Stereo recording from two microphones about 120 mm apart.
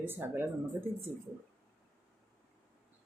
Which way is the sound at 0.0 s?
20° right (ahead or behind).